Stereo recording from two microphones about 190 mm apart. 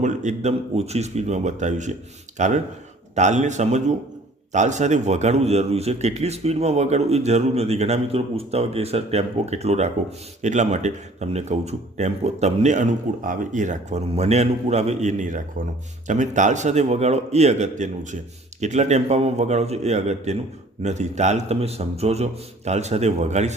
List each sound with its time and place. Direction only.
0.0 s a man's voice: 40° right (ahead or behind)